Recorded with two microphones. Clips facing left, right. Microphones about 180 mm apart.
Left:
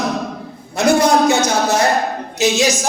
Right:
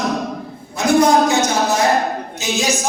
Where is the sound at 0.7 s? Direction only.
75° left (ahead or behind).